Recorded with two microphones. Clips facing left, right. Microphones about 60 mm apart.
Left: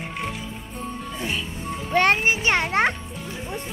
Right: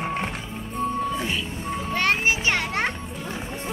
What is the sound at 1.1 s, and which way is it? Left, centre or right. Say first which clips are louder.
Music: right 2 dB; centre.